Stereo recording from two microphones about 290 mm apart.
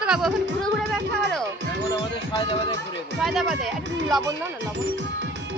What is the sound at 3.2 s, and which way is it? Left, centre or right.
Speech, centre.